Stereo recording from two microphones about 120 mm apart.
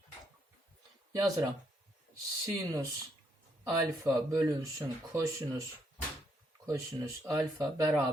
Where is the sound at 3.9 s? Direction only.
25° right (ahead or behind).